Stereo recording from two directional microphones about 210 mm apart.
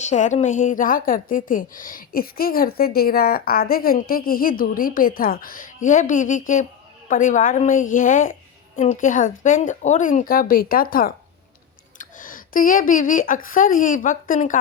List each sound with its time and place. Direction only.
0.0 s a woman's voice: 35° left (ahead or behind)